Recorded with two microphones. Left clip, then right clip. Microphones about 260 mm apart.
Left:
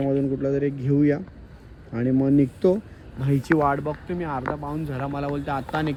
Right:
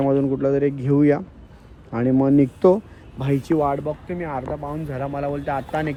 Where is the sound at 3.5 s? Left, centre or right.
Left.